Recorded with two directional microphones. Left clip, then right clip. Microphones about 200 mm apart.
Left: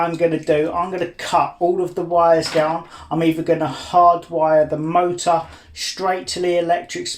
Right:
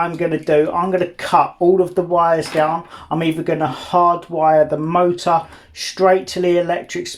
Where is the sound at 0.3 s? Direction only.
35° right (ahead or behind).